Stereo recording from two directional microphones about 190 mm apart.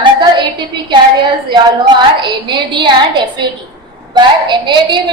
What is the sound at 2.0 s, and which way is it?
A woman's voice, 25° right (ahead or behind).